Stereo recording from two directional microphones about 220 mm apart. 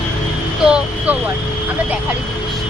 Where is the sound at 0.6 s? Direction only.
5° right (ahead or behind).